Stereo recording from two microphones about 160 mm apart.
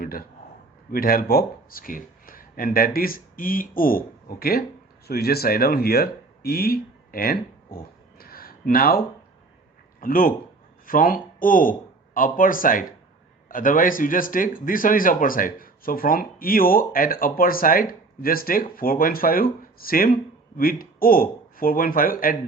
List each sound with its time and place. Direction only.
0.0 s a man's voice: 65° left (ahead or behind)
10.0 s speech: 60° left (ahead or behind)